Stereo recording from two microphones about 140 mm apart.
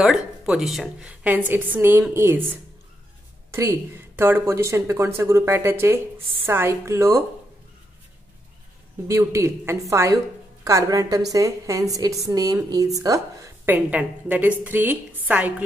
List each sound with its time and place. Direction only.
0.0 s a woman's voice: 5° right (ahead or behind)
4.2 s speech: 15° right (ahead or behind)
9.0 s speech: 20° right (ahead or behind)
13.7 s a woman's voice: 10° right (ahead or behind)